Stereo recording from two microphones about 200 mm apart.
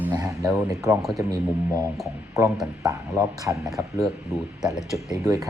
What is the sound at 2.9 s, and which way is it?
Speech, 15° right (ahead or behind).